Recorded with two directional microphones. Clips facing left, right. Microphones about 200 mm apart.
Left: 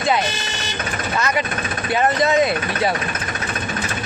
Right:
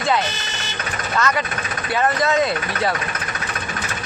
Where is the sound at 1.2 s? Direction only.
15° left (ahead or behind).